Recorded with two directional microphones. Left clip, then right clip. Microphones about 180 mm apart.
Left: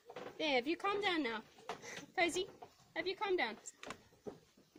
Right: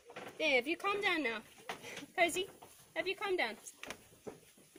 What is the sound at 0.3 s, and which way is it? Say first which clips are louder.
Speech: right 3 dB; 50° left (ahead or behind).